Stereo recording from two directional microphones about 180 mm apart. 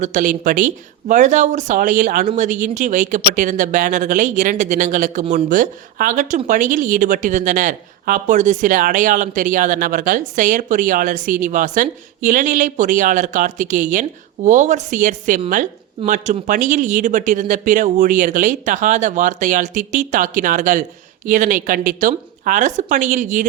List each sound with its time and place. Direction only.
0.0 s speech: 45° right (ahead or behind)